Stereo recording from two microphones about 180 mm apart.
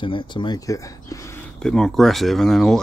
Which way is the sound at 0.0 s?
25° left (ahead or behind).